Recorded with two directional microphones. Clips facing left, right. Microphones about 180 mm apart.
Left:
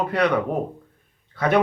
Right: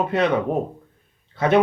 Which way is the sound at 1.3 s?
25° right (ahead or behind).